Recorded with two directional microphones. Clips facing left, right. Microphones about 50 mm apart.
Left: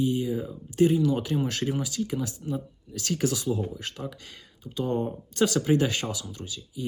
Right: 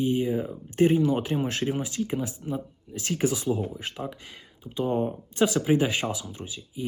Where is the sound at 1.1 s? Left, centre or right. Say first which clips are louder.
Right 1 dB; right.